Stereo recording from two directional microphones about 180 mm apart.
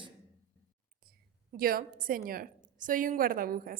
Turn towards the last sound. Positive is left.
turn(degrees=-55)  # may be behind; listen again after turning